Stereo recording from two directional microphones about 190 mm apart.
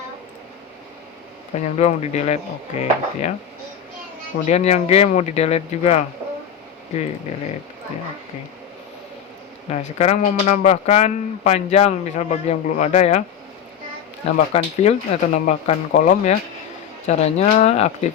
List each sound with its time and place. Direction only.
1.5 s a man's voice: 35° left (ahead or behind)
4.4 s a man's voice: 35° left (ahead or behind)
9.6 s a man's voice: 35° left (ahead or behind)
14.3 s a man's voice: 35° left (ahead or behind)